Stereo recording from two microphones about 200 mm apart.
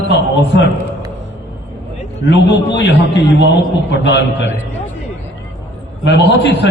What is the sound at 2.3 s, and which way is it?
Speech, 60° left (ahead or behind).